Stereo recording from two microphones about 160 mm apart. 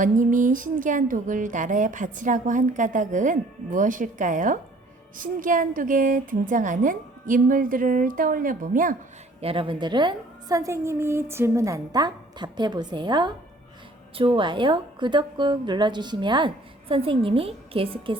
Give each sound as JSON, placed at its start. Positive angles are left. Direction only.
{"t": 0.0, "sound": "a sound", "side_deg": -55}
{"t": 5.1, "sound": "a woman's voice", "side_deg": -55}
{"t": 9.4, "sound": "a woman's voice", "side_deg": -35}